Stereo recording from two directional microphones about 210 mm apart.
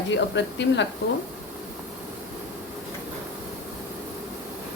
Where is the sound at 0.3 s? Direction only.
55° left (ahead or behind).